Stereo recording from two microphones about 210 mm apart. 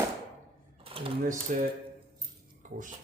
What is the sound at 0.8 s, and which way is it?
Typewriter, 25° right (ahead or behind).